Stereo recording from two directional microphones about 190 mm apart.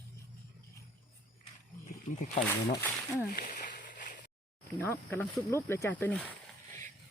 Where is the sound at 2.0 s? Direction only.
40° left (ahead or behind).